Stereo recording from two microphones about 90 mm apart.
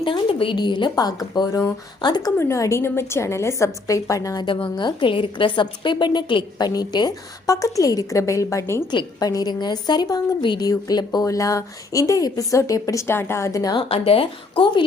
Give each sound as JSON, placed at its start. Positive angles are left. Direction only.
{"t": 0.0, "sound": "a sound", "side_deg": 80}
{"t": 0.5, "sound": "a woman's voice", "side_deg": 60}
{"t": 2.4, "sound": "a woman's voice", "side_deg": 30}
{"t": 4.4, "sound": "a woman's voice", "side_deg": 60}
{"t": 8.9, "sound": "a woman's voice", "side_deg": 50}
{"t": 13.7, "sound": "speech", "side_deg": 90}